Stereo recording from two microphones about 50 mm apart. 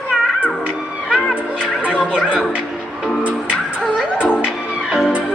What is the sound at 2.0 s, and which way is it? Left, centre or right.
Music, centre.